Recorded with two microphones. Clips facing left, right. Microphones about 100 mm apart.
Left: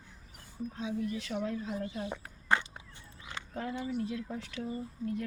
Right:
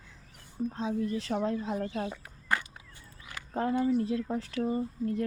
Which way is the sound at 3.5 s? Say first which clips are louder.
Right 9 dB; 40° right (ahead or behind).